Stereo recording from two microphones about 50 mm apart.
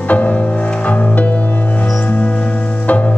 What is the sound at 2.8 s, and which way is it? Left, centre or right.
Music, left.